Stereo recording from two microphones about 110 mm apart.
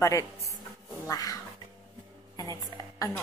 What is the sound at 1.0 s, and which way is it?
A woman's voice, 35° left (ahead or behind).